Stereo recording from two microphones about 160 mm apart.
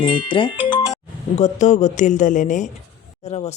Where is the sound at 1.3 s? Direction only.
50° left (ahead or behind).